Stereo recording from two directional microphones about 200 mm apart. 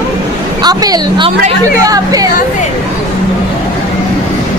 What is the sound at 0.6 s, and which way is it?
A woman's voice, 20° right (ahead or behind).